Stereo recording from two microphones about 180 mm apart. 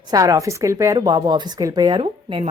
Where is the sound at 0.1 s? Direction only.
20° right (ahead or behind).